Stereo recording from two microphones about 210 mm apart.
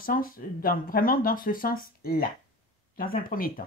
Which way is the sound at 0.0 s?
40° left (ahead or behind).